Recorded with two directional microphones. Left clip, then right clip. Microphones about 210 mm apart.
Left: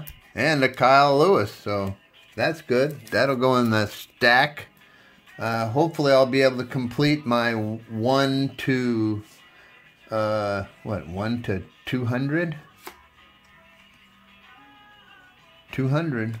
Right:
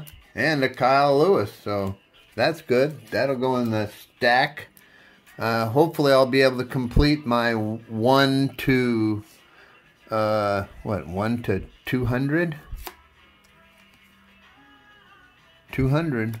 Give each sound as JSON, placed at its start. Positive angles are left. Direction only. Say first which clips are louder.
{"t": 0.3, "sound": "speech", "louder": "left 1 dB", "side_deg": 10}
{"t": 2.3, "sound": "speech", "louder": "right 1 dB", "side_deg": -10}
{"t": 3.1, "sound": "speech", "louder": "left 3 dB", "side_deg": 20}
{"t": 5.3, "sound": "speech", "louder": "right 2 dB", "side_deg": -10}
{"t": 15.7, "sound": "speech", "louder": "right 2 dB", "side_deg": -10}